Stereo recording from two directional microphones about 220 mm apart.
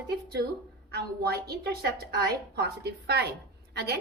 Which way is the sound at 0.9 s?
45° right (ahead or behind).